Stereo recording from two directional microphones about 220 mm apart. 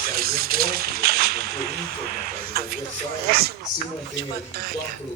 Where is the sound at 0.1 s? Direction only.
45° right (ahead or behind).